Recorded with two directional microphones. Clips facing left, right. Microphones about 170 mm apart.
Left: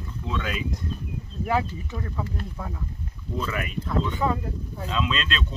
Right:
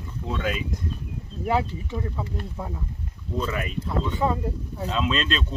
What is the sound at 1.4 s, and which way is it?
Speech, 25° right (ahead or behind).